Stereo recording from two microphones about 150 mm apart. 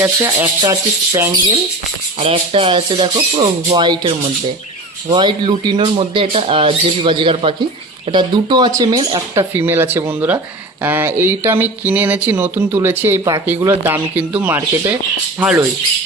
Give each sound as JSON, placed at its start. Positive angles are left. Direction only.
{"t": 0.0, "sound": "speech", "side_deg": -15}
{"t": 2.1, "sound": "speech", "side_deg": -40}
{"t": 9.3, "sound": "speech", "side_deg": -15}